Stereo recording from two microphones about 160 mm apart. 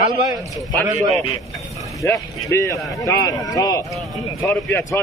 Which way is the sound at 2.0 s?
20° left (ahead or behind).